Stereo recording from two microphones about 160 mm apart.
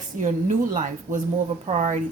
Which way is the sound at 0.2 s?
50° right (ahead or behind).